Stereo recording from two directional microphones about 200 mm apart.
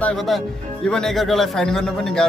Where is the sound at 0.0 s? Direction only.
Centre (ahead or behind).